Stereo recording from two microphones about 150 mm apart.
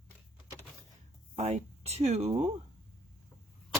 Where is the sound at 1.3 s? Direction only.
50° right (ahead or behind).